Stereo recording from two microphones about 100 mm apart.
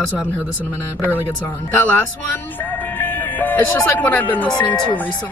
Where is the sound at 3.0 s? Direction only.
15° left (ahead or behind).